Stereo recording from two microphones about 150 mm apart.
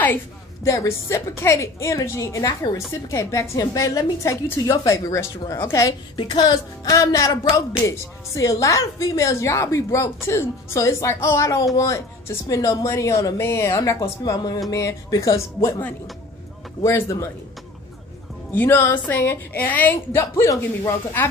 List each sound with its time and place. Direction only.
0.7 s speech: 20° left (ahead or behind)
16.8 s speech: 20° left (ahead or behind)
18.5 s a woman's voice: 15° left (ahead or behind)